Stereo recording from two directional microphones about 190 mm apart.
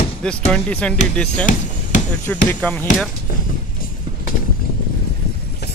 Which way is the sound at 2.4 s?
10° left (ahead or behind).